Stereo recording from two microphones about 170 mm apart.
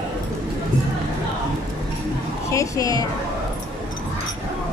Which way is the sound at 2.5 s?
20° left (ahead or behind).